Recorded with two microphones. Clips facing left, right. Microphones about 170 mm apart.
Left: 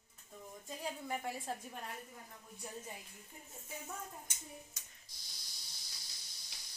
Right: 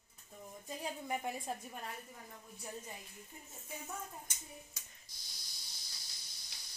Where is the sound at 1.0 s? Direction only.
15° right (ahead or behind).